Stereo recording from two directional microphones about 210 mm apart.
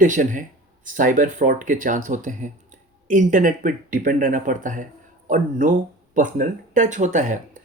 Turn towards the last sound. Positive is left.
turn(degrees=-35)  # may be behind; listen again after turning